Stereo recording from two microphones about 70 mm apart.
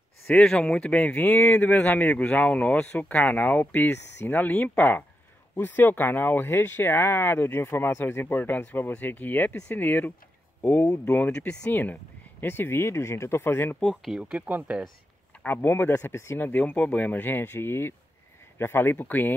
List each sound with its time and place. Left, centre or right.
0.3 s speech: centre
11.7 s speech: left
13.8 s speech: centre
14.2 s speech: centre
15.4 s speech: left